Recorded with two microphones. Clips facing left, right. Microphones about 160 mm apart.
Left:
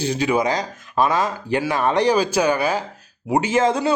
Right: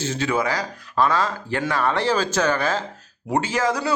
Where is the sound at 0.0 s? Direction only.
15° left (ahead or behind).